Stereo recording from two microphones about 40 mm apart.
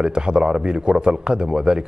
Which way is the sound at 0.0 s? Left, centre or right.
Right.